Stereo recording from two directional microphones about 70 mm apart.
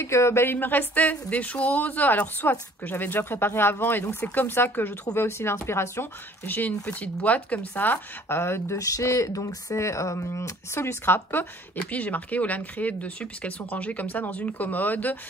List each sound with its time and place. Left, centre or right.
0.0 s speech: left
5.1 s speech: left
6.4 s speech: left
8.7 s speech: left